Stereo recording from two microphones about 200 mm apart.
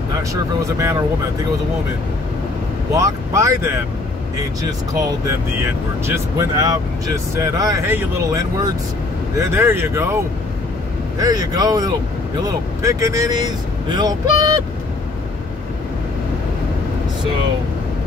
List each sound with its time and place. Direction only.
0.3 s speech: 15° right (ahead or behind)
2.9 s speech: 15° right (ahead or behind)
4.9 s speech: 15° right (ahead or behind)